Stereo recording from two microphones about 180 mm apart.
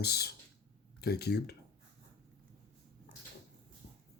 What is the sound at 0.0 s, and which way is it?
Speech, 60° left (ahead or behind).